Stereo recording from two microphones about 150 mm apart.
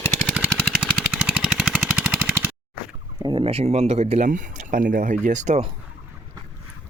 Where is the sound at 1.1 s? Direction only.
5° right (ahead or behind).